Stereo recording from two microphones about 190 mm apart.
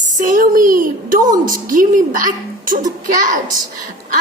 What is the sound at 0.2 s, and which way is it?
A woman's voice, 45° right (ahead or behind).